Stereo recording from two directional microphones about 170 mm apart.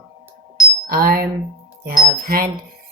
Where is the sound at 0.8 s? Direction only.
60° right (ahead or behind).